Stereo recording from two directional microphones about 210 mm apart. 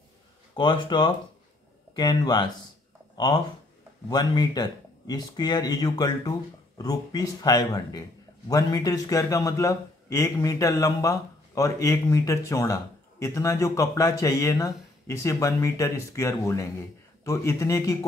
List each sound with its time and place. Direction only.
0.6 s speech: 20° left (ahead or behind)
4.1 s a man's voice: 20° left (ahead or behind)